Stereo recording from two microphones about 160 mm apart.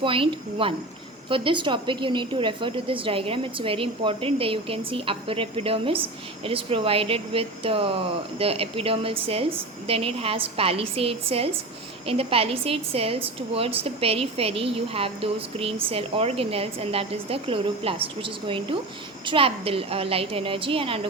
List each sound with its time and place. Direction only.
0.0 s a woman's voice: 35° right (ahead or behind)